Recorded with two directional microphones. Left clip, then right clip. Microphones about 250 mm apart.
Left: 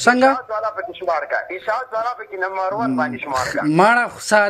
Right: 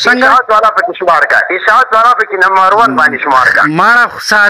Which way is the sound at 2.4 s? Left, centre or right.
Right.